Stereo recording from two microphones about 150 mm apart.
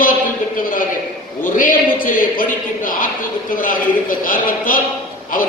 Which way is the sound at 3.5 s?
65° left (ahead or behind).